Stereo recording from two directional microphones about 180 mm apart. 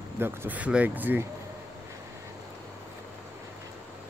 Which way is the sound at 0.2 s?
15° right (ahead or behind).